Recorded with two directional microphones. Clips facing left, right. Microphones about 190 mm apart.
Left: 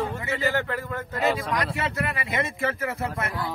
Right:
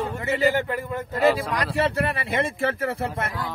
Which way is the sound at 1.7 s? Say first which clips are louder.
Right 5 dB; 30° right (ahead or behind).